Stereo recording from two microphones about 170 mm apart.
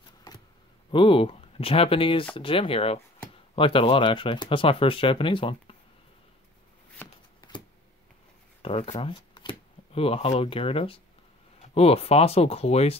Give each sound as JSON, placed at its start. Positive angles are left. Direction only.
{"t": 0.9, "sound": "speech", "side_deg": 30}
{"t": 8.6, "sound": "speech", "side_deg": 35}